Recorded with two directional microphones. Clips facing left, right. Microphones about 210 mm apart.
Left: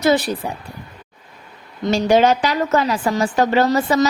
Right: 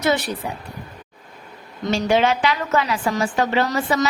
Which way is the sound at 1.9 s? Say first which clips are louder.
Left 4 dB; 40° left (ahead or behind).